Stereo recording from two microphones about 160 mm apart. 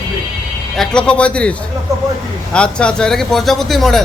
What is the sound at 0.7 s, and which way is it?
Speech, 5° left (ahead or behind).